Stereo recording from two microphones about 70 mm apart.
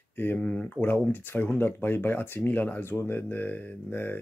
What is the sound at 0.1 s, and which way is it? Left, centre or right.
Speech, left.